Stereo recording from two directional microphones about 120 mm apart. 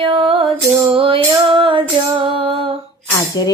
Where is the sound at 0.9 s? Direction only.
45° right (ahead or behind).